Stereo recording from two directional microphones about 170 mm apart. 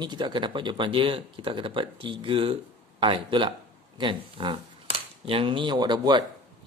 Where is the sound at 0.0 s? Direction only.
25° right (ahead or behind).